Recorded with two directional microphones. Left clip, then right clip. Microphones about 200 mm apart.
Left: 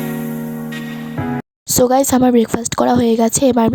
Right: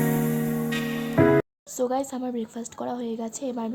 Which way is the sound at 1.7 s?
55° left (ahead or behind).